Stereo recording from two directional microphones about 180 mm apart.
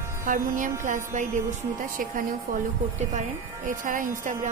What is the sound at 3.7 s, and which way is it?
Speech, 50° right (ahead or behind).